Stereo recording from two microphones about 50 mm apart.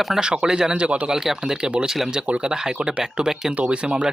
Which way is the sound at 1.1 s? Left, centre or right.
Centre.